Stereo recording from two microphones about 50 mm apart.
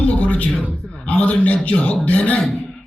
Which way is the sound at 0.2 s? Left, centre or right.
Left.